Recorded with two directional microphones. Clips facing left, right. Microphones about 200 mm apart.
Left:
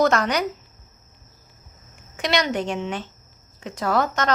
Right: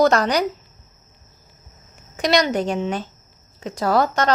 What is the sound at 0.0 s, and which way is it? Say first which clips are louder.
Speech: right 3 dB; 35° right (ahead or behind).